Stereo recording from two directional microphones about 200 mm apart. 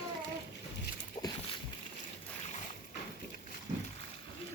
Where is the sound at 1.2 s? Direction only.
20° left (ahead or behind).